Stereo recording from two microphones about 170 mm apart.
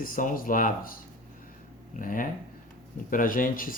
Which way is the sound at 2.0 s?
55° left (ahead or behind).